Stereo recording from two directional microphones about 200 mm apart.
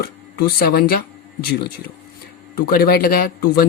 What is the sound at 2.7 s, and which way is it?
Speech, 50° left (ahead or behind).